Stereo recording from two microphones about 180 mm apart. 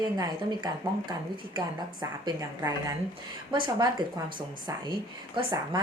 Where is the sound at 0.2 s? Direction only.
20° right (ahead or behind).